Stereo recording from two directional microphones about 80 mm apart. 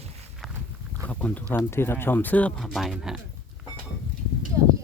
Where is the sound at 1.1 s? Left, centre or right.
Centre.